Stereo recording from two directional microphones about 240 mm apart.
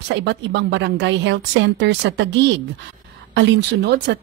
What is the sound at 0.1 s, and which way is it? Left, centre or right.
A woman's voice, right.